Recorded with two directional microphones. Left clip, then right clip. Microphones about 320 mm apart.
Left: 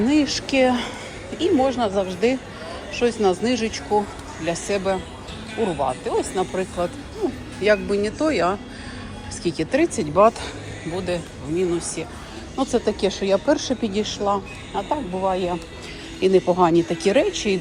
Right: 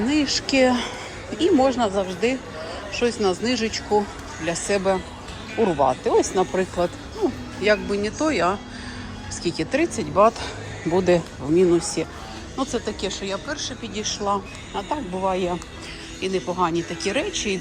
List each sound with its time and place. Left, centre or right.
0.1 s speech: centre
10.9 s speech: centre
12.5 s speech: centre
14.3 s speech: centre